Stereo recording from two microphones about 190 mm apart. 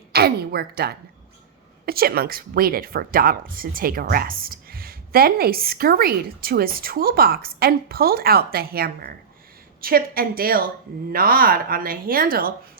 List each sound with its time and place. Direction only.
0.1 s a woman's voice: 55° right (ahead or behind)